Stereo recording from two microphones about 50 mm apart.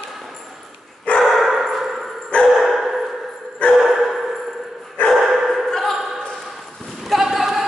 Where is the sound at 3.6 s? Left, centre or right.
Left.